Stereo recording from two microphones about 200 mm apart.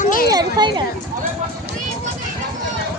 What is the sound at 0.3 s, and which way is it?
Children playing, 20° right (ahead or behind).